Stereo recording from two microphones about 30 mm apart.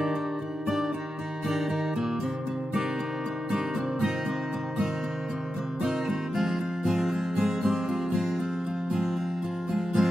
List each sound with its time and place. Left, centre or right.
1.5 s music: centre
5.8 s music: centre
9.7 s music: centre